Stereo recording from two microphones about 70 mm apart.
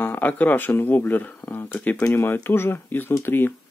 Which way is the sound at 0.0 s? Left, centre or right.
Left.